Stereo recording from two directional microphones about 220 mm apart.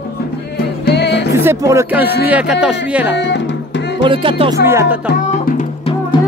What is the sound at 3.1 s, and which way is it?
Music, 50° left (ahead or behind).